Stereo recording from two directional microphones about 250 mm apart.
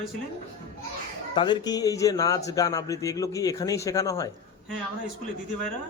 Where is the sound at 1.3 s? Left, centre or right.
Centre.